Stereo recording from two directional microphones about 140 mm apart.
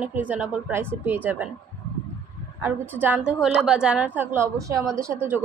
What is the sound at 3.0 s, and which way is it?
Speech, 10° right (ahead or behind).